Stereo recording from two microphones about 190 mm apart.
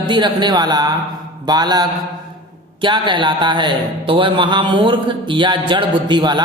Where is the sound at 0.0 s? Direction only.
25° right (ahead or behind).